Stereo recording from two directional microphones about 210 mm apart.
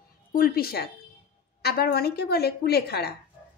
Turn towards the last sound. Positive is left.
turn(degrees=50)  # may be behind; listen again after turning